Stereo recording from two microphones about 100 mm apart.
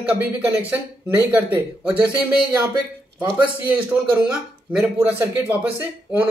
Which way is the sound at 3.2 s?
15° right (ahead or behind).